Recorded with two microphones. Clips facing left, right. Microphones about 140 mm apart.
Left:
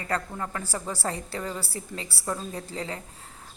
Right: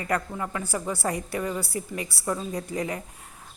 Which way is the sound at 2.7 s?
15° right (ahead or behind).